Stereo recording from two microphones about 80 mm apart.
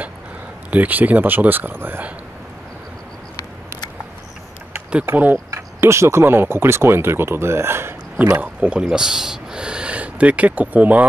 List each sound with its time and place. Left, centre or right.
0.7 s speech: right
5.0 s speech: right
5.5 s speech: right
8.4 s speech: centre